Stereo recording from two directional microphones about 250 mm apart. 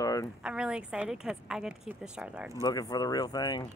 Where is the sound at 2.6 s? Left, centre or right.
Centre.